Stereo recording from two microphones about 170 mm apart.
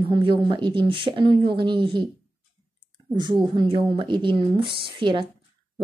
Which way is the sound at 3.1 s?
25° right (ahead or behind).